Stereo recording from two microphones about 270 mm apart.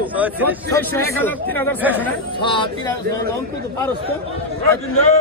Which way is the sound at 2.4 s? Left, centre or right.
Centre.